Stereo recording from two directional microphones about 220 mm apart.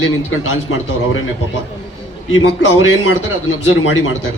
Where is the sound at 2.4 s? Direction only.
60° left (ahead or behind).